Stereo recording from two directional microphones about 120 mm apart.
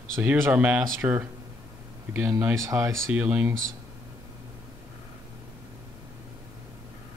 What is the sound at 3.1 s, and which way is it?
Speech, 15° right (ahead or behind).